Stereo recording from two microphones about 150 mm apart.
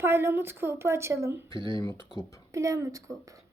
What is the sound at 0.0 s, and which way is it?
A woman's voice, 15° right (ahead or behind).